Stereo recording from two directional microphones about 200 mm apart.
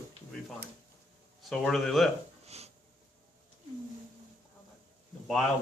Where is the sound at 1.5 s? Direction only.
Centre (ahead or behind).